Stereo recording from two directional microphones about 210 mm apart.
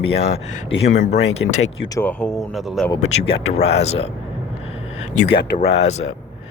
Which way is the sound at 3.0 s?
30° left (ahead or behind).